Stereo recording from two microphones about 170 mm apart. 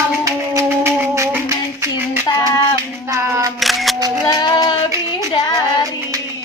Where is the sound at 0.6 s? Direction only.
15° right (ahead or behind).